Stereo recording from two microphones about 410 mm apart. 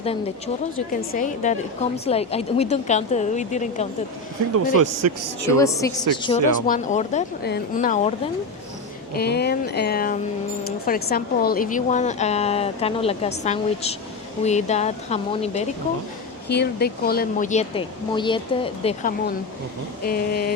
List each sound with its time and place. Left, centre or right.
0.0 s speech: centre
4.8 s speech: right
5.5 s speech: centre
9.1 s speech: left